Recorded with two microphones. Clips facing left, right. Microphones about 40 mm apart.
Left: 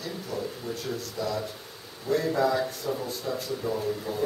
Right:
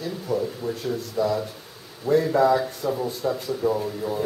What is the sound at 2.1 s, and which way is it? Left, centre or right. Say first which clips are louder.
Speech: right 6 dB; centre.